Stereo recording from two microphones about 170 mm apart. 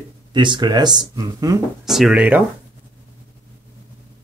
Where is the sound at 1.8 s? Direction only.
Centre (ahead or behind).